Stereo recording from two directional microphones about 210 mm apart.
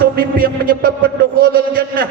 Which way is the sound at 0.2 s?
45° right (ahead or behind).